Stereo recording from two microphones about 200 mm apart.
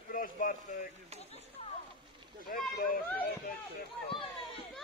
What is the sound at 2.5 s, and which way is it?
Speech, 45° left (ahead or behind).